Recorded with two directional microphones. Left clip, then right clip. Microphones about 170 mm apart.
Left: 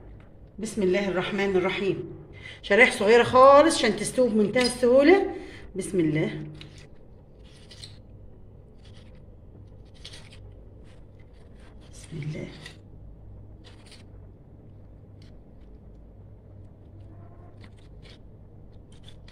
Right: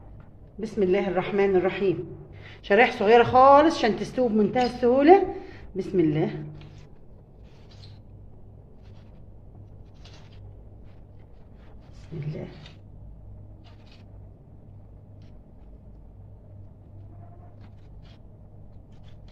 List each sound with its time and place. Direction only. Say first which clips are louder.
0.6 s speech: right 1 dB; 45° right (ahead or behind)